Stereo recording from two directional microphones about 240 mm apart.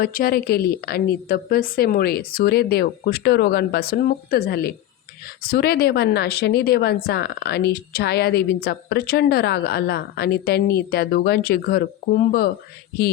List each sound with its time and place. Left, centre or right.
0.0 s speech: left